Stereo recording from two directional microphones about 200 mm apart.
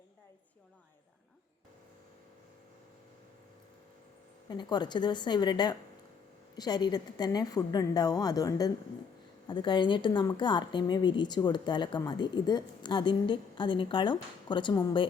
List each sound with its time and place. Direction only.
4.4 s a woman's voice: 20° left (ahead or behind)